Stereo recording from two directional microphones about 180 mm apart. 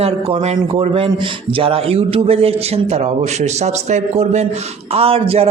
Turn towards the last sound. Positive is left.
turn(degrees=-35)  # may be behind; listen again after turning